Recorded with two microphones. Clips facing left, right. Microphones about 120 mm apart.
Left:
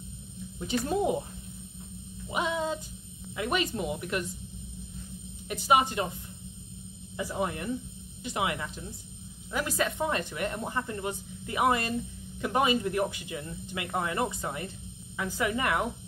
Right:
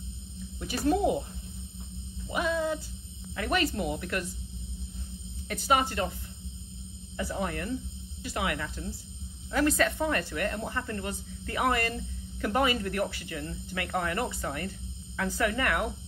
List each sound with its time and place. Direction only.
2.3 s a sound: 20° left (ahead or behind)
3.3 s speech: 20° left (ahead or behind)
5.5 s speech: 15° left (ahead or behind)
7.2 s speech: 15° left (ahead or behind)